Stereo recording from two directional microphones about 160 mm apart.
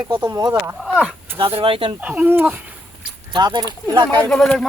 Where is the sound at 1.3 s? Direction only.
35° right (ahead or behind).